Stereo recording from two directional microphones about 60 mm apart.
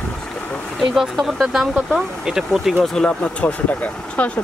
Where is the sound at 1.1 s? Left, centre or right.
Centre.